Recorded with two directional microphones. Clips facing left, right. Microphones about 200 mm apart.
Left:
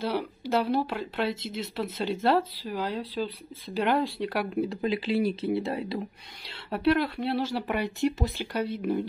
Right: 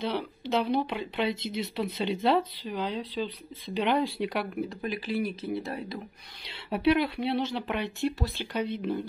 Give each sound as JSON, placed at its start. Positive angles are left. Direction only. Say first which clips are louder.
{"t": 0.0, "sound": "speech", "louder": "left 2 dB", "side_deg": 10}
{"t": 4.6, "sound": "speech", "louder": "left 5 dB", "side_deg": 25}
{"t": 6.7, "sound": "speech", "louder": "even", "side_deg": 0}
{"t": 8.5, "sound": "speech", "louder": "left 2 dB", "side_deg": 10}